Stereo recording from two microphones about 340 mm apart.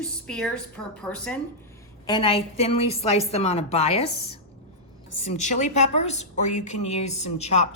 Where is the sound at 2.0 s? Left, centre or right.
Centre.